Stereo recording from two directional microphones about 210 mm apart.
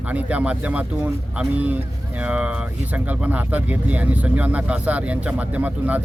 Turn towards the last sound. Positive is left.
turn(degrees=-5)  # may be behind; listen again after turning